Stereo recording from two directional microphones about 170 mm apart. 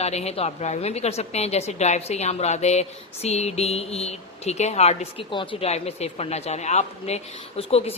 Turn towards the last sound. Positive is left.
turn(degrees=35)  # may be behind; listen again after turning